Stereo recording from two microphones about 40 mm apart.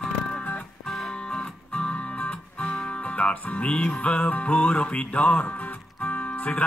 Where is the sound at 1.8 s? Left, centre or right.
Left.